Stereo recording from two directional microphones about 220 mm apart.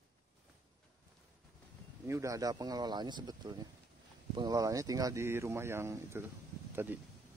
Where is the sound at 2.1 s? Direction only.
15° right (ahead or behind).